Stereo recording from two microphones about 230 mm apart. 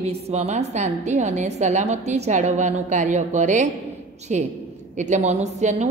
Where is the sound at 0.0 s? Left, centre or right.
Right.